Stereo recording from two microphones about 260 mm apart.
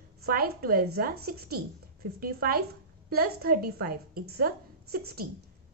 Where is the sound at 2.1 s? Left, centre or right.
Right.